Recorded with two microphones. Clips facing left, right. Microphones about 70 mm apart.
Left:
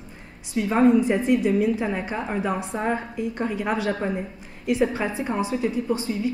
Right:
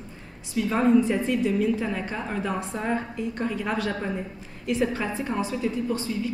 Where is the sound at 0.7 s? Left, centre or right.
Centre.